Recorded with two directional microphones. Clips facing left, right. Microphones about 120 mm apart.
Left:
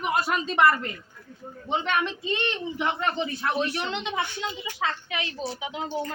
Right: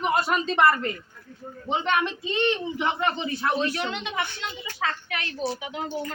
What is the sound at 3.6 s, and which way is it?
Speech, 20° left (ahead or behind).